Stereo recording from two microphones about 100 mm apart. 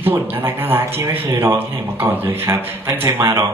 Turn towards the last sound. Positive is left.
turn(degrees=-25)  # may be behind; listen again after turning